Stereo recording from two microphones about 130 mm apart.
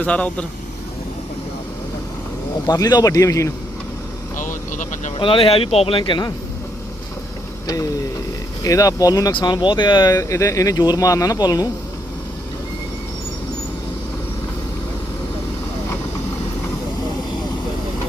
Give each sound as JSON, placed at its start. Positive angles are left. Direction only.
{"t": 0.0, "sound": "speech", "side_deg": 10}
{"t": 2.6, "sound": "speech", "side_deg": 30}
{"t": 5.1, "sound": "speech", "side_deg": 45}
{"t": 8.6, "sound": "speech", "side_deg": 25}